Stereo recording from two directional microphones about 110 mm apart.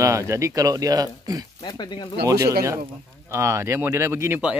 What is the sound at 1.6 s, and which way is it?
Speech, 40° left (ahead or behind).